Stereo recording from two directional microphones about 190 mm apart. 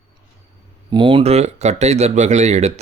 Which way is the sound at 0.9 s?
25° right (ahead or behind).